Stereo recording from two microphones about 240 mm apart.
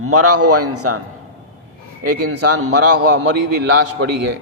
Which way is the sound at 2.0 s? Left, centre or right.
Right.